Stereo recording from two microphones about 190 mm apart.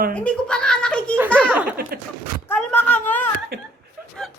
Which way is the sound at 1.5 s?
10° right (ahead or behind).